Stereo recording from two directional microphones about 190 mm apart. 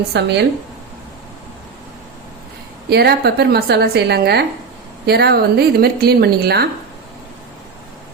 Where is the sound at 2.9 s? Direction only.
55° right (ahead or behind).